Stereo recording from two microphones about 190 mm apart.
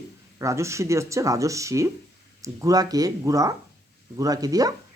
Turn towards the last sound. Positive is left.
turn(degrees=-20)  # may be behind; listen again after turning